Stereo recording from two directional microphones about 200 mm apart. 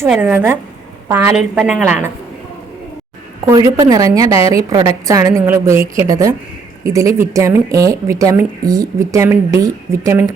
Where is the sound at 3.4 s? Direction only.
15° right (ahead or behind).